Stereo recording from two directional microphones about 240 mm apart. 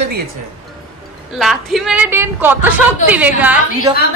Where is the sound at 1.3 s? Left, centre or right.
Centre.